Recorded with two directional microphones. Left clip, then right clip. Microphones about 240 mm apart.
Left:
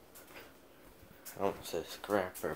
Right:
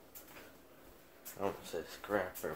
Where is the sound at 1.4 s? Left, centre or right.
Left.